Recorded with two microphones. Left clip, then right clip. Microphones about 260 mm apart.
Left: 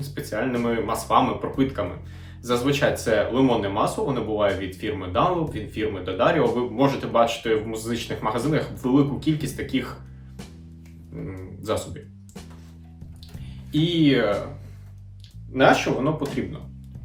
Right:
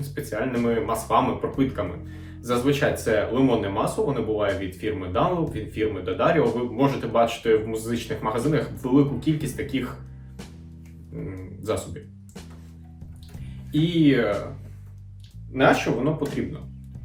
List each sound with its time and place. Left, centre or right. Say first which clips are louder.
0.1 s speech: left 1 dB; centre
11.6 s speech: left 1 dB; centre
13.7 s speech: even; centre
15.5 s speech: left 2 dB; centre